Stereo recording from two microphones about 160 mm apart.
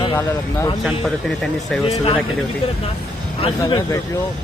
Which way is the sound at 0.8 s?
Centre (ahead or behind).